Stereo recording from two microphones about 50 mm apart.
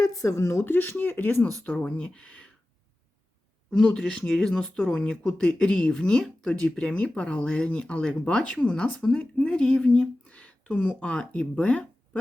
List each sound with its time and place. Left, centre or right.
0.2 s speech: left
0.6 s speech: left
1.8 s speech: left
3.7 s speech: centre